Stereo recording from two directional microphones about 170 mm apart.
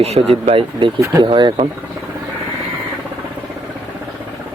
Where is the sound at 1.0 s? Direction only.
20° right (ahead or behind).